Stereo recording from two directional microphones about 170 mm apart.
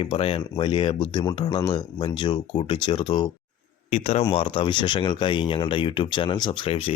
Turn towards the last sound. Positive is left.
turn(degrees=30)  # may be behind; listen again after turning